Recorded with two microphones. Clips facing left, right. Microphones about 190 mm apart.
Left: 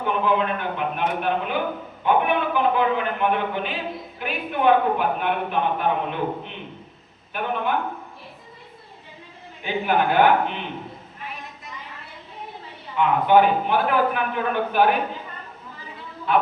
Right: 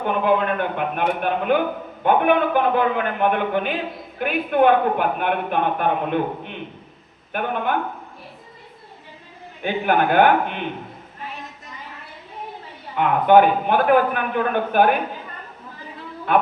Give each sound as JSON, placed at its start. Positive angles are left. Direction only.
{"t": 0.0, "sound": "a man's voice", "side_deg": -55}
{"t": 9.6, "sound": "speech", "side_deg": -55}
{"t": 13.0, "sound": "speech", "side_deg": -55}
{"t": 16.3, "sound": "speech", "side_deg": -55}